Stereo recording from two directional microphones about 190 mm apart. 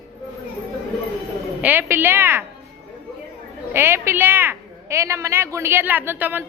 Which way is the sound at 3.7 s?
10° right (ahead or behind).